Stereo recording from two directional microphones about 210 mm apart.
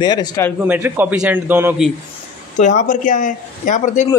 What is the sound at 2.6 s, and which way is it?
Speech, 35° left (ahead or behind).